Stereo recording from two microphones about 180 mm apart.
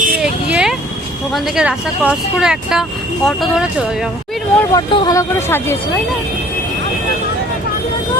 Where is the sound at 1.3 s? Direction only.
5° right (ahead or behind).